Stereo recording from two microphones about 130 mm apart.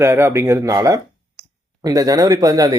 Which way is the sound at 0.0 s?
20° right (ahead or behind).